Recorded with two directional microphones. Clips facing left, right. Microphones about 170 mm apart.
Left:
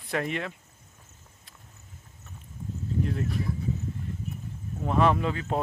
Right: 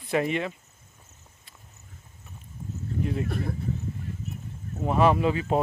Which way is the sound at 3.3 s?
55° right (ahead or behind).